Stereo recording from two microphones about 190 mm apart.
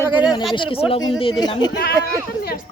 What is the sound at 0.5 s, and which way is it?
Speech, 25° left (ahead or behind).